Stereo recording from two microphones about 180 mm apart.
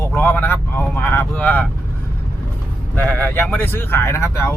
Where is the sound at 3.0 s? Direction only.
10° left (ahead or behind).